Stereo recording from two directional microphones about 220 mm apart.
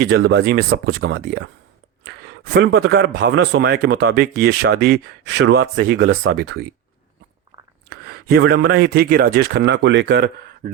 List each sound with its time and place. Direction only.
0.0 s speech: 55° right (ahead or behind)
7.9 s a sound: 45° right (ahead or behind)
8.6 s speech: 45° right (ahead or behind)